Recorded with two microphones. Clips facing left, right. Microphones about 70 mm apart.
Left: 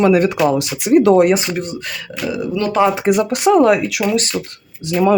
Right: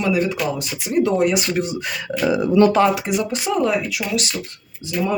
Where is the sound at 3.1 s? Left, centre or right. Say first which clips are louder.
Left 8 dB; left.